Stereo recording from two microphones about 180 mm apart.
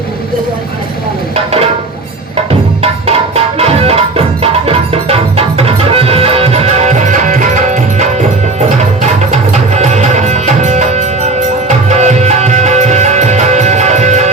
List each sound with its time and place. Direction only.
2.5 s music: 35° right (ahead or behind)
9.3 s music: 40° right (ahead or behind)